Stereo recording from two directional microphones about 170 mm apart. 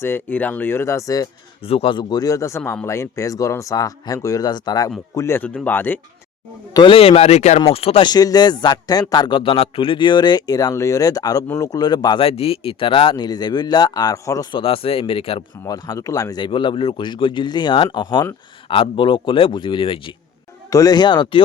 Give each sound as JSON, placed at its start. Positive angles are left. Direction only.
{"t": 0.0, "sound": "speech", "side_deg": 10}
{"t": 1.6, "sound": "a man's voice", "side_deg": 35}
{"t": 6.7, "sound": "speech", "side_deg": 30}
{"t": 8.1, "sound": "a man's voice", "side_deg": 20}
{"t": 14.6, "sound": "speech", "side_deg": 30}
{"t": 15.6, "sound": "a man's voice", "side_deg": 20}